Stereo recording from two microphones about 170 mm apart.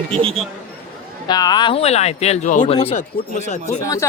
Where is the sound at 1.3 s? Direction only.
25° left (ahead or behind); by 2.7 s 45° left (ahead or behind).